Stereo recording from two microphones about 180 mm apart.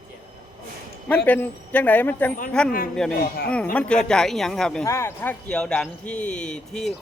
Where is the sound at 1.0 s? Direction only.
10° left (ahead or behind).